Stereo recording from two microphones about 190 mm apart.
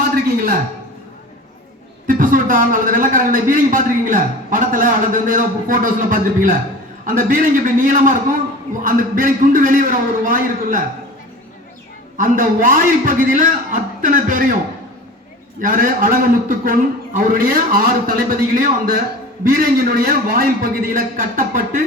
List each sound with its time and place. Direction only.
0.3 s a sound: 50° right (ahead or behind)
2.0 s a man's voice: 45° right (ahead or behind)
12.1 s a man's voice: 45° right (ahead or behind)
15.6 s a man's voice: 45° right (ahead or behind)